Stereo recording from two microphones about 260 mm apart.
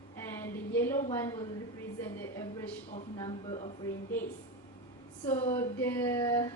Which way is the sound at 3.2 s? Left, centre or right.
Centre.